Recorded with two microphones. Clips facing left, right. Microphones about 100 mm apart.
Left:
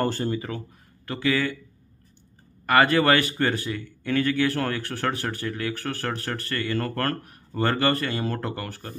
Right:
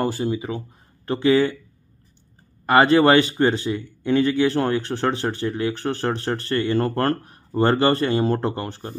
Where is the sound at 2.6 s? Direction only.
25° right (ahead or behind).